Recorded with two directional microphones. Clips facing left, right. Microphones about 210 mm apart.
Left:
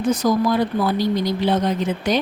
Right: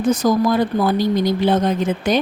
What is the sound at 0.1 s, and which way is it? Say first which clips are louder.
Speech: right 2 dB; 45° right (ahead or behind).